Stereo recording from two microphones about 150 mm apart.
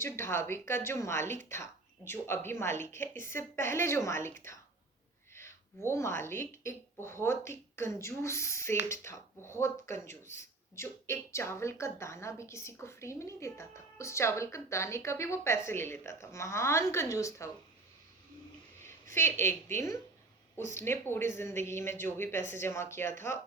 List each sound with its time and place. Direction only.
0.0 s speech: 15° left (ahead or behind)
18.9 s a woman's voice: 15° left (ahead or behind)